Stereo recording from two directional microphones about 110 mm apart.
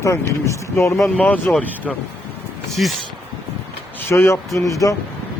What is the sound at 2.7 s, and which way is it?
Speech, centre (ahead or behind).